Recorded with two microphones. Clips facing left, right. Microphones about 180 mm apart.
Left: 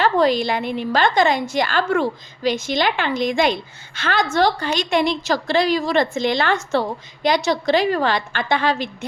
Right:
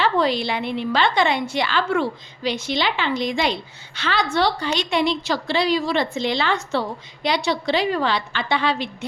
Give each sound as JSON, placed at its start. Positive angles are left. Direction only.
{"t": 0.0, "sound": "a woman's voice", "side_deg": 45}